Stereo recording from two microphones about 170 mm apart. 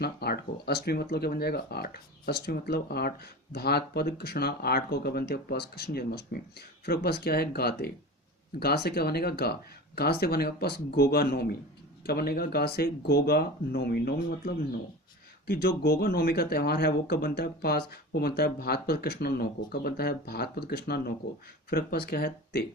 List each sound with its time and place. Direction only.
0.0 s speech: 70° left (ahead or behind)